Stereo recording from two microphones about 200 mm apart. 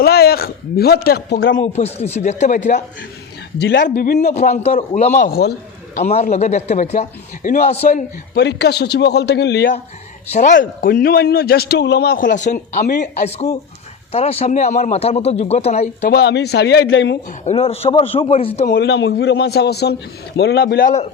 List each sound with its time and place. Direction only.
0.0 s speech: 50° left (ahead or behind)
1.6 s a man's voice: 30° left (ahead or behind)
3.6 s a man's voice: 60° left (ahead or behind)
3.8 s a man's voice: 40° left (ahead or behind)
6.0 s a man's voice: 30° left (ahead or behind)
8.4 s a man's voice: 55° left (ahead or behind)
10.3 s a man's voice: 40° left (ahead or behind)
16.0 s a man's voice: 55° left (ahead or behind)
17.4 s a man's voice: 30° left (ahead or behind)
18.7 s a man's voice: 55° left (ahead or behind)